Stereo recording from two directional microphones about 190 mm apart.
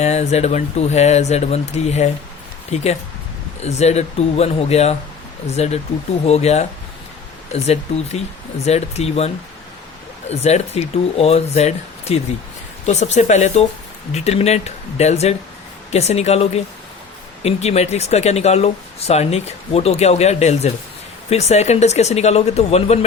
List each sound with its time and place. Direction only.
0.0 s speech: 35° left (ahead or behind)